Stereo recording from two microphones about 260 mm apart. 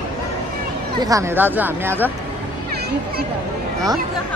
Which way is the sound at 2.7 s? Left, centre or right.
Right.